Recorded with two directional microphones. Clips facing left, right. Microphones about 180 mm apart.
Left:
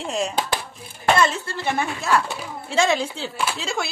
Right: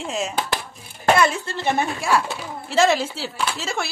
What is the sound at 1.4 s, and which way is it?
Speech, 20° right (ahead or behind).